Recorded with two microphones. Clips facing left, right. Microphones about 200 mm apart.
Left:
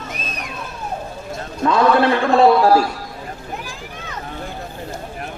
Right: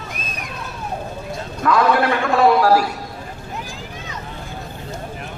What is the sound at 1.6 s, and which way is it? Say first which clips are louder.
A man's voice: left 2 dB; 25° left (ahead or behind).